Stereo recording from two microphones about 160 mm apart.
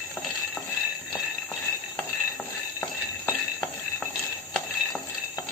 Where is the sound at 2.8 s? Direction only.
15° left (ahead or behind).